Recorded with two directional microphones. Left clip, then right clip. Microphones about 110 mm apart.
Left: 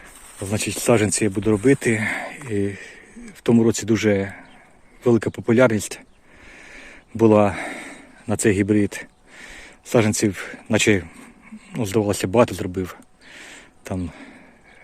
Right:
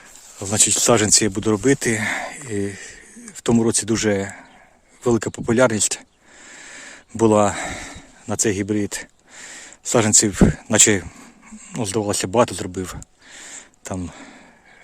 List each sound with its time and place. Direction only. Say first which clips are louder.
0.5 s speech: right 3 dB; 35° right (ahead or behind)
1.6 s speech: left 1 dB; 30° right (ahead or behind)
5.8 s speech: right 9 dB; 35° right (ahead or behind)
6.6 s a sound: right 3 dB; 30° right (ahead or behind)
8.4 s speech: left 4 dB; 5° right (ahead or behind)
8.9 s speech: right 2 dB; 25° right (ahead or behind)